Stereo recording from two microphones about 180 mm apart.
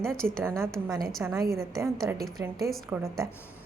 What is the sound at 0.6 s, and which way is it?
Speech, 15° right (ahead or behind).